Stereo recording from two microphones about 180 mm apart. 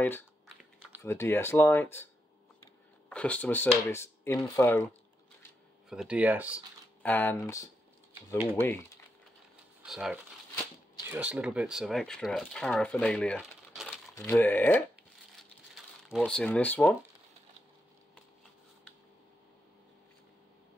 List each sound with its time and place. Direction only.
1.0 s speech: 15° left (ahead or behind)
3.1 s speech: 5° left (ahead or behind)
5.9 s speech: 5° right (ahead or behind)
7.0 s speech: 10° left (ahead or behind)
9.8 s speech: 5° right (ahead or behind)
14.1 s speech: 10° left (ahead or behind)
15.3 s crumpling: centre (ahead or behind)